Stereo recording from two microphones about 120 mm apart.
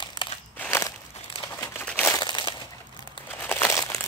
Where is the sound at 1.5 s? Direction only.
20° left (ahead or behind).